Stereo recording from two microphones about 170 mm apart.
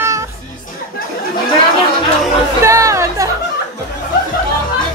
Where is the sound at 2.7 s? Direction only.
20° right (ahead or behind).